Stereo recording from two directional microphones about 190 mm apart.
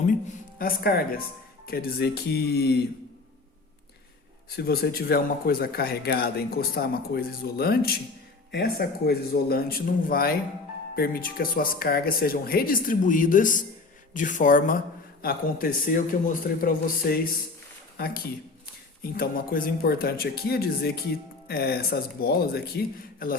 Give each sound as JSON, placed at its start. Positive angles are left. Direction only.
{"t": 0.6, "sound": "speech", "side_deg": 55}
{"t": 4.5, "sound": "speech", "side_deg": 55}